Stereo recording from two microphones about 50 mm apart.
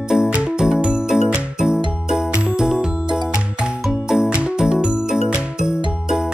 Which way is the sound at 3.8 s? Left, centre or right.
Centre.